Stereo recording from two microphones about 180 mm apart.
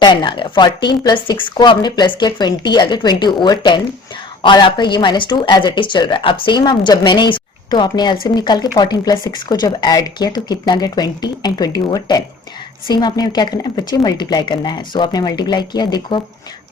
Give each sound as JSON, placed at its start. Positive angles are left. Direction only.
{"t": 0.0, "sound": "speech", "side_deg": 25}